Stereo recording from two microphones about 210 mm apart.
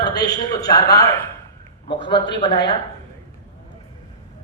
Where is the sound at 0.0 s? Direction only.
20° left (ahead or behind).